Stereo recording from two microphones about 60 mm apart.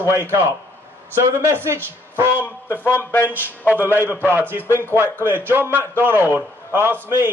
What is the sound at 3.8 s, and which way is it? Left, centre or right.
A man's voice, right.